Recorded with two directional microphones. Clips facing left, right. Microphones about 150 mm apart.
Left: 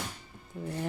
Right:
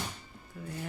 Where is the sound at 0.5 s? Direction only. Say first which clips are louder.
Left 6 dB; 25° left (ahead or behind).